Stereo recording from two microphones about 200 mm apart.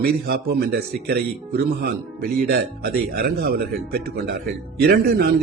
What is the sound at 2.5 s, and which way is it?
A man's voice, 50° right (ahead or behind).